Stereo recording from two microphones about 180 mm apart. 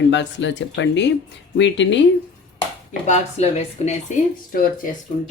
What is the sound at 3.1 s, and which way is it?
A woman's voice, 40° left (ahead or behind).